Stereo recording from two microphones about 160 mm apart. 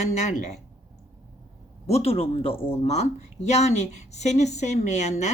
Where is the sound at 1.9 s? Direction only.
40° left (ahead or behind).